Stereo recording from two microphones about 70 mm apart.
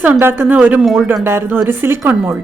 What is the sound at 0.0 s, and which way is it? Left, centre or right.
Speech, right.